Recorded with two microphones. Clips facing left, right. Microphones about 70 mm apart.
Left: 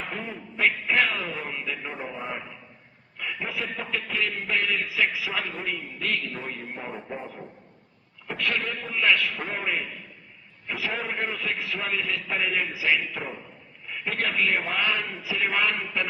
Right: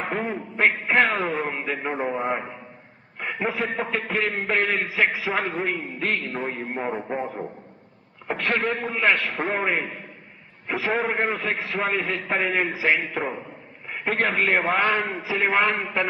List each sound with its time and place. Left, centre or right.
0.0 s a man's voice: right